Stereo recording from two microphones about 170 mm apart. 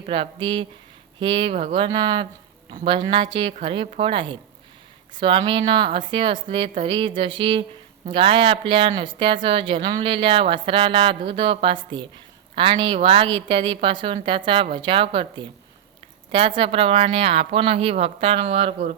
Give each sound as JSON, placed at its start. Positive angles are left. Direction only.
{"t": 0.0, "sound": "a woman's voice", "side_deg": -30}
{"t": 16.6, "sound": "a woman's voice", "side_deg": -35}